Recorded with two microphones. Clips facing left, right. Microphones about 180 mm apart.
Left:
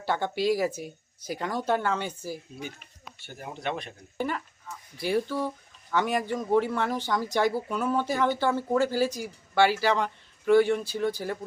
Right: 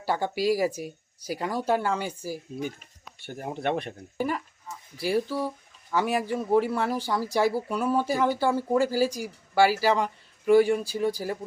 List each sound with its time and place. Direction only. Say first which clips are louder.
0.0 s speech: right 1 dB; 10° right (ahead or behind)
3.2 s speech: right 6 dB; 50° right (ahead or behind)
4.2 s speech: right 2 dB; 10° right (ahead or behind)